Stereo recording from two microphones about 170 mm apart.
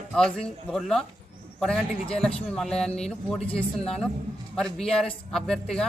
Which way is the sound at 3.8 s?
5° left (ahead or behind).